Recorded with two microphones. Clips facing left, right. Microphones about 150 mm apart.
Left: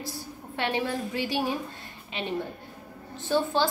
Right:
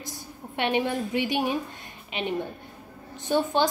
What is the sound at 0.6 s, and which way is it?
A woman's voice, 20° right (ahead or behind).